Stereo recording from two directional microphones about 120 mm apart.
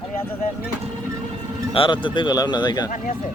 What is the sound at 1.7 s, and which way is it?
Speech, 45° left (ahead or behind).